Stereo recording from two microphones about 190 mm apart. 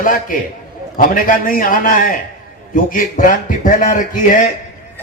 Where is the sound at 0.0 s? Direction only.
45° left (ahead or behind).